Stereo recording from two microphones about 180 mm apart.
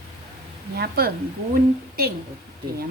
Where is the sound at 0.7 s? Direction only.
60° right (ahead or behind).